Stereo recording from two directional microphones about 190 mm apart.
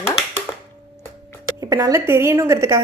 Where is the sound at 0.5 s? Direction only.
5° left (ahead or behind).